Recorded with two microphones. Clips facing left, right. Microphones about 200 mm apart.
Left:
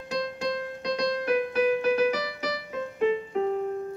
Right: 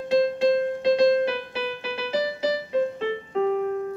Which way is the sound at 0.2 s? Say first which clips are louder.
Right 7 dB; 25° right (ahead or behind).